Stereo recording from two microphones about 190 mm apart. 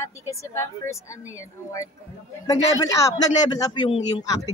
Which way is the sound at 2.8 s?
15° left (ahead or behind).